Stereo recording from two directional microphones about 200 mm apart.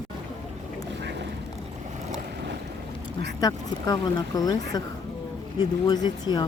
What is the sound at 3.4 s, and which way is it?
Speech, 20° left (ahead or behind).